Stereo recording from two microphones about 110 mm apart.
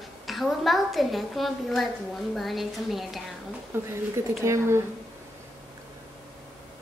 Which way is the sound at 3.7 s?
20° right (ahead or behind).